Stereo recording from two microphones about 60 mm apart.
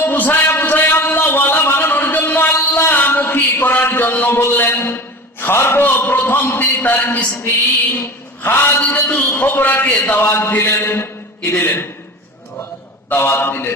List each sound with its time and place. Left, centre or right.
0.0 s a sound: left
8.4 s a man's voice: left
13.1 s a man's voice: left